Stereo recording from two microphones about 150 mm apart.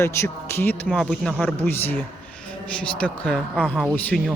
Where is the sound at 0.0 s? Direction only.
15° left (ahead or behind).